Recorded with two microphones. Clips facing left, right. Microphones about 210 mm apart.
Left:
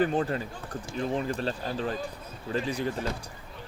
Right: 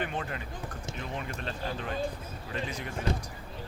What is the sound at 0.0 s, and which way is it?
Speech, 35° left (ahead or behind).